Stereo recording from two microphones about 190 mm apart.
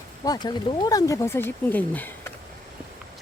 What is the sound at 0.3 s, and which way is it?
Speech, 20° left (ahead or behind).